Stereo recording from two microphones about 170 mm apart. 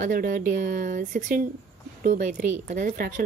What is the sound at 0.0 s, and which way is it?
A woman's voice, 50° right (ahead or behind).